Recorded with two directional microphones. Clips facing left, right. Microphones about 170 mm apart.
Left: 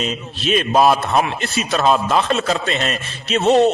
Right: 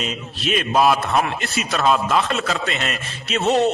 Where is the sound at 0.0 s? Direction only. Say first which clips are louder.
Left 3 dB; 30° left (ahead or behind).